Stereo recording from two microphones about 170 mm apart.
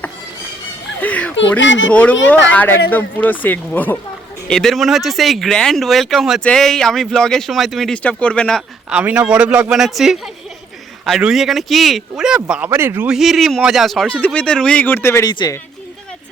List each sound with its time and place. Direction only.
1.0 s a sound: 10° left (ahead or behind)
1.4 s a child's voice: 90° left
1.9 s speech: 10° left (ahead or behind)
9.0 s speech: 5° right (ahead or behind)
13.1 s speech: centre (ahead or behind); by 15.5 s 25° left (ahead or behind)